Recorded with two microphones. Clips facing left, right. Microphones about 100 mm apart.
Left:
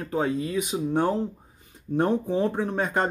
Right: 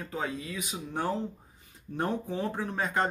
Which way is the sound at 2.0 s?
20° left (ahead or behind).